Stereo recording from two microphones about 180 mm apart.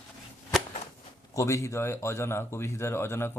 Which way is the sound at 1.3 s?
15° left (ahead or behind).